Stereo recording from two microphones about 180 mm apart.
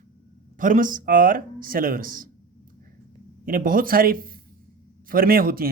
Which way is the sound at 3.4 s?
50° right (ahead or behind).